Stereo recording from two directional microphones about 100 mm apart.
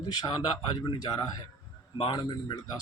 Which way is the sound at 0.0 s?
50° left (ahead or behind).